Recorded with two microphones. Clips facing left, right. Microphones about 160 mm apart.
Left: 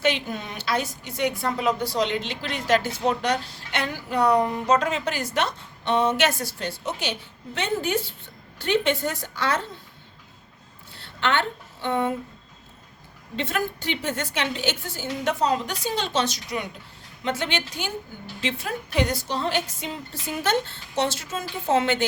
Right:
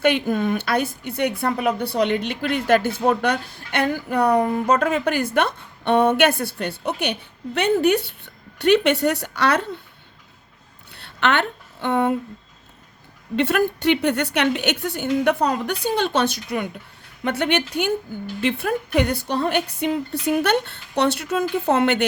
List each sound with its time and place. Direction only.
0.0 s speech: 55° right (ahead or behind)
10.9 s a sound: 65° right (ahead or behind)
13.3 s speech: 65° right (ahead or behind)